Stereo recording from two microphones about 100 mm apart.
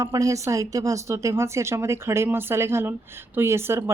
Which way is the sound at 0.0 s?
35° right (ahead or behind).